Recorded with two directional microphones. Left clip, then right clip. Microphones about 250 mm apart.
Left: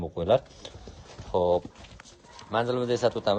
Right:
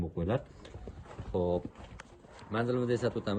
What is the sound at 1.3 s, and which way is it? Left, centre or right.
Speech, left.